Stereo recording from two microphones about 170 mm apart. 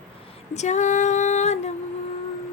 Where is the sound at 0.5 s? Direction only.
45° left (ahead or behind).